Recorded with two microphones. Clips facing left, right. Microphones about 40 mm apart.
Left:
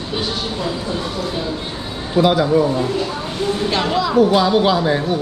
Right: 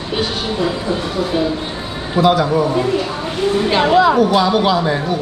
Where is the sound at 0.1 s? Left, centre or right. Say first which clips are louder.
Right 4 dB; right.